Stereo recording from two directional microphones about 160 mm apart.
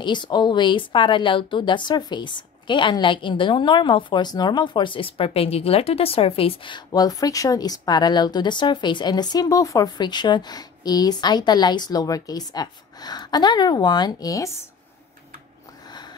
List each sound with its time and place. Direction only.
0.0 s speech: 30° left (ahead or behind)